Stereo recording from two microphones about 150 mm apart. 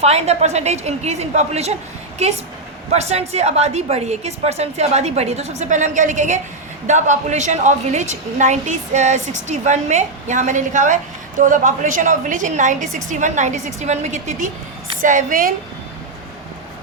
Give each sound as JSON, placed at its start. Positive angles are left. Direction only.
{"t": 0.0, "sound": "a woman's voice", "side_deg": -45}
{"t": 15.0, "sound": "a woman's voice", "side_deg": -60}